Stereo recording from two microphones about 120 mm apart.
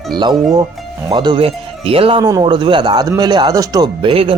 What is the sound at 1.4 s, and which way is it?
Speech, 50° right (ahead or behind).